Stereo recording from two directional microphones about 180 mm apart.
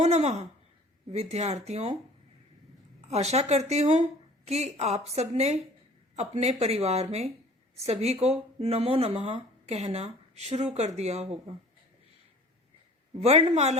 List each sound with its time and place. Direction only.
0.0 s speech: 40° right (ahead or behind)
3.1 s speech: 35° right (ahead or behind)
13.1 s speech: 35° right (ahead or behind)